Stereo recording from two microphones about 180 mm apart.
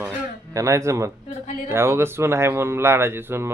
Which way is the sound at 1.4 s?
45° left (ahead or behind).